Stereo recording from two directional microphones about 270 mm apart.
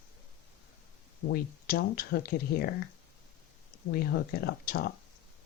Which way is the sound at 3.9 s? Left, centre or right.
Left.